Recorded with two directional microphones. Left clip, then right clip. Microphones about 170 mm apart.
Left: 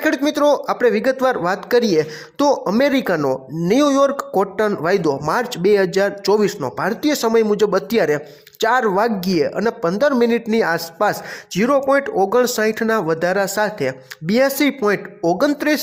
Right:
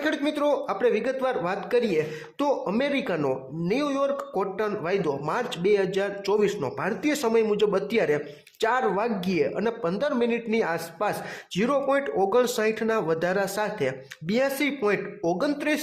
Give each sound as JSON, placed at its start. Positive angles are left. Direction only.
{"t": 0.0, "sound": "speech", "side_deg": 35}